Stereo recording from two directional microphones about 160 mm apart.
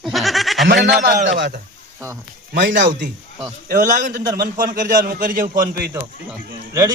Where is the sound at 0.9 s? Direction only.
80° right.